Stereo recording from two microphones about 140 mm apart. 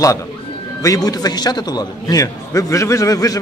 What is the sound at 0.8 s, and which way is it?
A man's voice, 25° left (ahead or behind).